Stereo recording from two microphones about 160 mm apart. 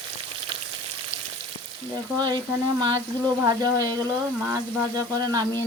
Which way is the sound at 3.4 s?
20° right (ahead or behind).